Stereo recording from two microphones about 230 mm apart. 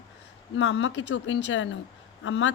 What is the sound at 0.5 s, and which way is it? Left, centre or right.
A woman's voice, left.